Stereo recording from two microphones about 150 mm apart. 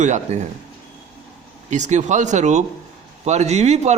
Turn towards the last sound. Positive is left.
turn(degrees=-45)  # may be behind; listen again after turning